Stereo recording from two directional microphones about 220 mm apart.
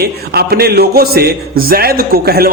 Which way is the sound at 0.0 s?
45° right (ahead or behind).